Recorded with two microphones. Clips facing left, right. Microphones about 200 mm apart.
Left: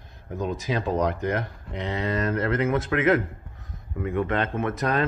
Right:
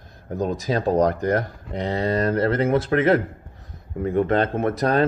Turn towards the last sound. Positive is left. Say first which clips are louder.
# right 5 dB
turn(degrees=-35)  # may be behind; listen again after turning